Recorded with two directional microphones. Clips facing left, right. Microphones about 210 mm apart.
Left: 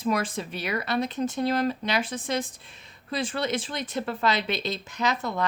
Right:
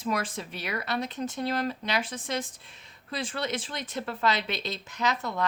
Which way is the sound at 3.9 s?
25° left (ahead or behind).